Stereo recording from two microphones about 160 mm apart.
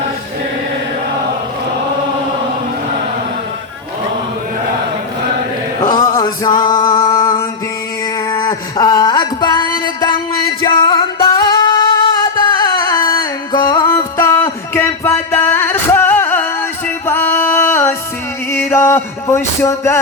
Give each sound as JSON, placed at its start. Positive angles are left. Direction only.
{"t": 5.9, "sound": "male singing", "side_deg": 25}
{"t": 8.3, "sound": "a sound", "side_deg": 25}
{"t": 10.6, "sound": "music", "side_deg": 30}